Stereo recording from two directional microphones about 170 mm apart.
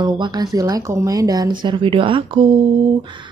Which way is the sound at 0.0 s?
25° right (ahead or behind).